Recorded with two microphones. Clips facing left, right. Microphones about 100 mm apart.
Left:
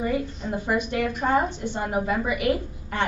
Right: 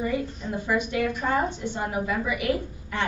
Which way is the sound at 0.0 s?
40° left (ahead or behind).